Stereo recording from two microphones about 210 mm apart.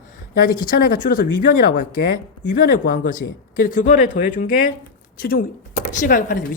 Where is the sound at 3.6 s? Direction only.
40° left (ahead or behind).